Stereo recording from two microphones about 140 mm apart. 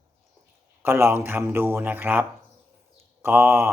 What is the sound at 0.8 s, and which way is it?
A man's voice, 15° right (ahead or behind).